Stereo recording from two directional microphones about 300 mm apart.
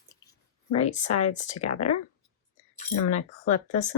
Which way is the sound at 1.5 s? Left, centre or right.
Left.